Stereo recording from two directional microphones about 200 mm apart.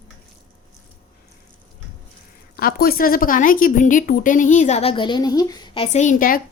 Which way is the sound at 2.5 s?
50° left (ahead or behind).